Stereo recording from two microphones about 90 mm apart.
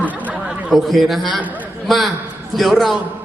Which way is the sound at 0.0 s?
15° right (ahead or behind).